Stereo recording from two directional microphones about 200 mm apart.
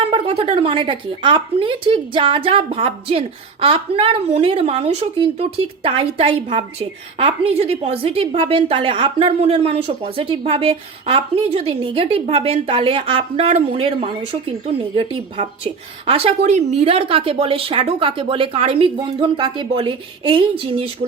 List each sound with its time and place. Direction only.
0.0 s speech: 30° right (ahead or behind)